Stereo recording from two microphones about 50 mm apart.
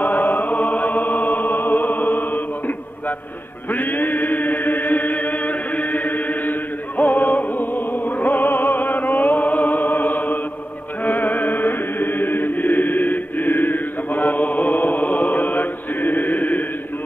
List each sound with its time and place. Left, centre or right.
0.0 s music: left
3.7 s chant: left
7.0 s music: left
11.1 s chant: left